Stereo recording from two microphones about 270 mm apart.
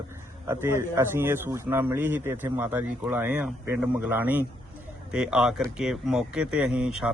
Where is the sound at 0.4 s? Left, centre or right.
Centre.